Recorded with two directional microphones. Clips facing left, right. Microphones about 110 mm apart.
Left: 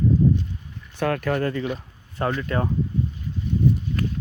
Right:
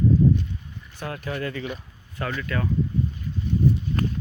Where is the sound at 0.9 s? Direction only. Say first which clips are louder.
Left 8 dB; 65° left (ahead or behind).